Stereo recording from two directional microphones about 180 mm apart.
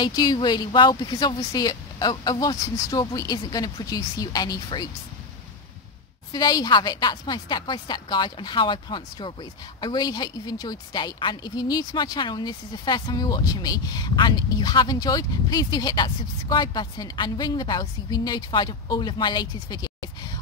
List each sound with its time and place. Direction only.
0.0 s a woman's voice: 20° left (ahead or behind)
6.3 s a woman's voice: 20° left (ahead or behind)